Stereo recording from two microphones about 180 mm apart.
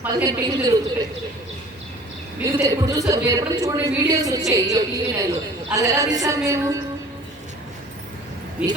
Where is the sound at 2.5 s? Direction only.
20° right (ahead or behind).